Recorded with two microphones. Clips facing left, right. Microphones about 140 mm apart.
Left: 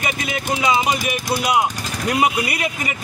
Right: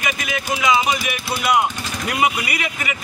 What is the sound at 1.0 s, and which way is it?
Speech, 40° left (ahead or behind).